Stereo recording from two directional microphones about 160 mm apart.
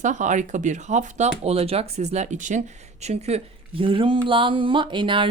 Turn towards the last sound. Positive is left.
turn(degrees=-30)  # may be behind; listen again after turning